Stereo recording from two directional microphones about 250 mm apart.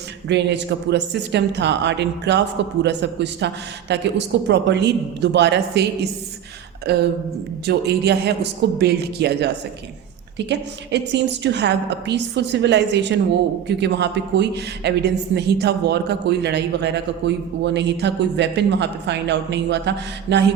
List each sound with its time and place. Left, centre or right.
0.3 s a woman's voice: right